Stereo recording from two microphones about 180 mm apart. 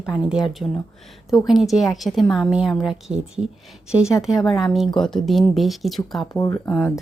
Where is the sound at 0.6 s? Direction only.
15° left (ahead or behind).